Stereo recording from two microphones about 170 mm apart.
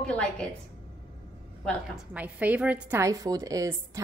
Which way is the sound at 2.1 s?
10° right (ahead or behind).